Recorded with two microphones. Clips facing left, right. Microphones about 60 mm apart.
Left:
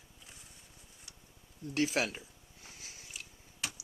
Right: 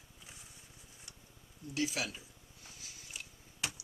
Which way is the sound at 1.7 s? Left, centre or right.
Left.